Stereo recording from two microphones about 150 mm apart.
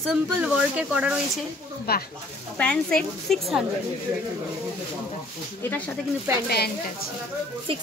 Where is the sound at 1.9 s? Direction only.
90° left.